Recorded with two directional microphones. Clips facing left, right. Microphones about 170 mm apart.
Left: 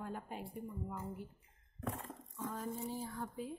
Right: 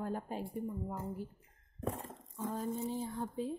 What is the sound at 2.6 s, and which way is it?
Speech, 20° right (ahead or behind).